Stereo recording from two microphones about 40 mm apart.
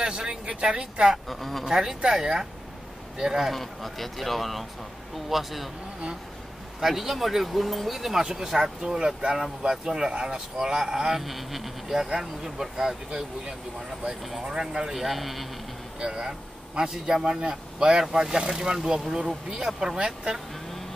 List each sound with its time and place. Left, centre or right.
0.0 s speech: right
1.3 s speech: centre
1.6 s speech: centre
3.2 s speech: centre
3.5 s speech: centre
6.8 s speech: centre
8.8 s speech: centre
15.0 s speech: centre
16.0 s speech: centre